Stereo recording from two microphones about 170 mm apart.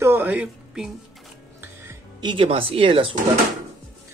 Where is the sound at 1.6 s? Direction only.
15° right (ahead or behind).